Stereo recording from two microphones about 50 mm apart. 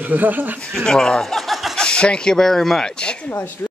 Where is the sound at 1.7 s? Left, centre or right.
Centre.